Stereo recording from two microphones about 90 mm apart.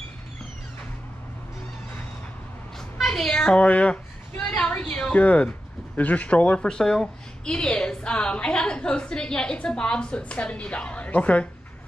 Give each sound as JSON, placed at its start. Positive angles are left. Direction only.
{"t": 3.0, "sound": "speech", "side_deg": 0}
{"t": 4.6, "sound": "a sound", "side_deg": 10}
{"t": 5.2, "sound": "speech", "side_deg": 15}